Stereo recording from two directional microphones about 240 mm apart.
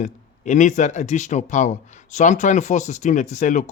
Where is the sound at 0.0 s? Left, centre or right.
Left.